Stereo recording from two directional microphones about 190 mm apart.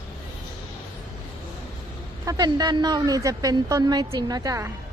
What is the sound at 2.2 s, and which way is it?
A woman's voice, 20° right (ahead or behind).